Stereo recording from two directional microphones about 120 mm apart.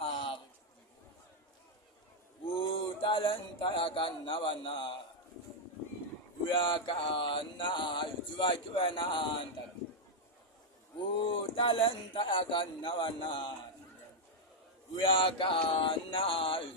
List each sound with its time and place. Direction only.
0.0 s a sound: 50° left (ahead or behind)
2.6 s speech: 50° left (ahead or behind)
6.5 s male singing: 45° left (ahead or behind)
11.1 s male singing: 45° left (ahead or behind)
15.0 s male singing: 45° left (ahead or behind)